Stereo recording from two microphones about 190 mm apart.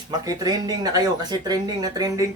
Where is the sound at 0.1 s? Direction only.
20° right (ahead or behind).